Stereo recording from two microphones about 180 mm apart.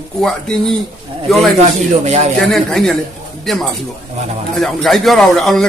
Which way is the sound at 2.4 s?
Centre (ahead or behind).